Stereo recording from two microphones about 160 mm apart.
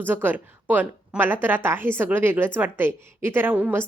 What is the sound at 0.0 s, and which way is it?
A woman's voice, 10° right (ahead or behind).